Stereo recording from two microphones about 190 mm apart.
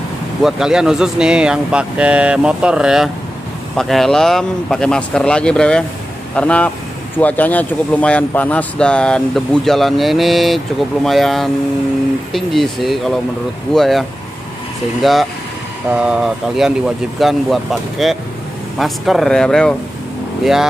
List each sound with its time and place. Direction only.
0.4 s speech: 5° right (ahead or behind)